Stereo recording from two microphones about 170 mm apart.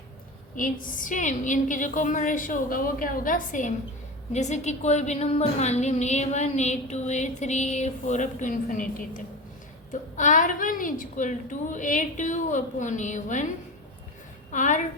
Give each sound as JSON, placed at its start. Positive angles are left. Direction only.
{"t": 0.5, "sound": "a woman's voice", "side_deg": 50}
{"t": 14.5, "sound": "a woman's voice", "side_deg": 45}